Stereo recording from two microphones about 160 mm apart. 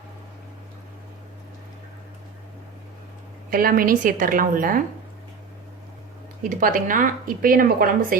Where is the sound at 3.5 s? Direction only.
65° right (ahead or behind).